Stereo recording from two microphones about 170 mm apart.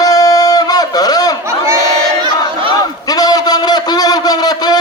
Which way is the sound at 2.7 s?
20° left (ahead or behind).